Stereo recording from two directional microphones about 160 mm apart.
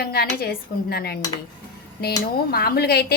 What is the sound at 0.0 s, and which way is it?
A woman's voice, 80° left.